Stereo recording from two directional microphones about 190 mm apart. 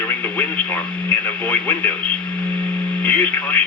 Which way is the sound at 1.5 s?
10° left (ahead or behind).